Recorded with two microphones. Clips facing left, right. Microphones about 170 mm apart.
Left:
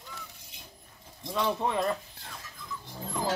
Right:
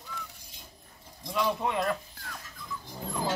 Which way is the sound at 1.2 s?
25° left (ahead or behind).